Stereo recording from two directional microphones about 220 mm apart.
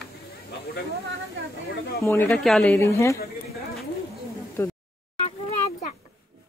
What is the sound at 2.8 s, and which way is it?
Speech, 15° left (ahead or behind).